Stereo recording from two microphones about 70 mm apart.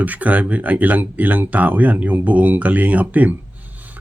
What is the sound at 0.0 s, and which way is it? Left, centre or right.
Speech, right.